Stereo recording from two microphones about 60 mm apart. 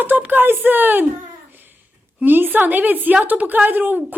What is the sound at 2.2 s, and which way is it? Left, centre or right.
Speech, right.